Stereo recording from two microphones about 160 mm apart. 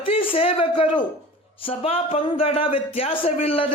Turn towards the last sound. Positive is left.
turn(degrees=35)  # may be behind; listen again after turning